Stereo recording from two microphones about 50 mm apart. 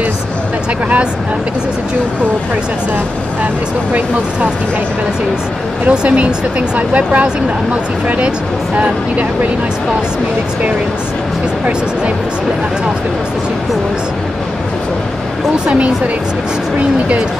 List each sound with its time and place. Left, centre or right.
5.9 s speech: right
15.6 s speech: centre